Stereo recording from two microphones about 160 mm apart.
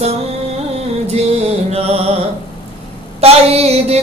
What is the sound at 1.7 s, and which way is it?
Mantra, 40° right (ahead or behind).